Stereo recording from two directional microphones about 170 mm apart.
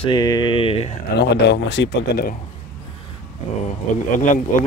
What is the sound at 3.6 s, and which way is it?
Speech, 45° left (ahead or behind).